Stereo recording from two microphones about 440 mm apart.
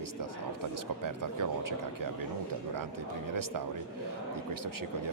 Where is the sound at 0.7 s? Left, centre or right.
Right.